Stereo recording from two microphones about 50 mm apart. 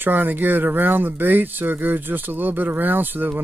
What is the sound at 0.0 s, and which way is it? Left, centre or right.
Speech, right.